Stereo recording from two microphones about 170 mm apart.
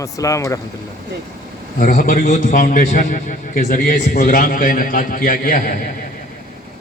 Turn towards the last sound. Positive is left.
turn(degrees=50)  # may be behind; listen again after turning